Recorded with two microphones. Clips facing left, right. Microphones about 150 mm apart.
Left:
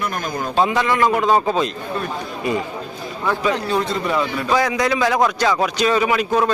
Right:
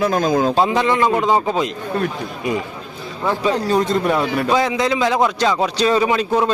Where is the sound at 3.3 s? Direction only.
35° right (ahead or behind); by 4.4 s 60° right (ahead or behind).